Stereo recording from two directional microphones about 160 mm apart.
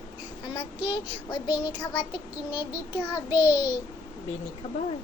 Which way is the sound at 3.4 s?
25° left (ahead or behind).